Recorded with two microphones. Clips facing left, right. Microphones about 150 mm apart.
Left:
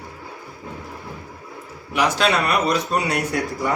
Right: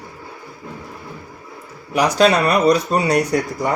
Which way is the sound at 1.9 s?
40° right (ahead or behind).